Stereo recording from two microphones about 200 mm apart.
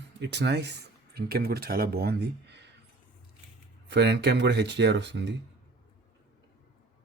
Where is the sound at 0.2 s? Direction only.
60° right (ahead or behind).